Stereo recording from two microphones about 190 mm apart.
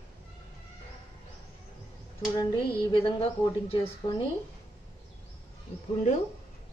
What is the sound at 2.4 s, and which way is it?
A woman's voice, 25° left (ahead or behind).